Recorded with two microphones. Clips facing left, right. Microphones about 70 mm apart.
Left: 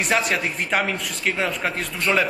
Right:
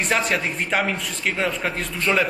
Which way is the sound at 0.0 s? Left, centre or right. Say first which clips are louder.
Even; centre.